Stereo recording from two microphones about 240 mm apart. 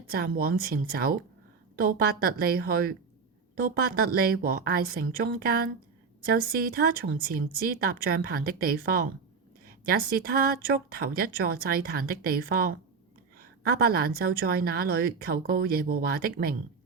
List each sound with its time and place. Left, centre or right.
0.1 s a woman's voice: right